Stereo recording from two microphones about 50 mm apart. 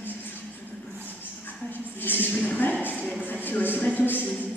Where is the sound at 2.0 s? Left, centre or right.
Left.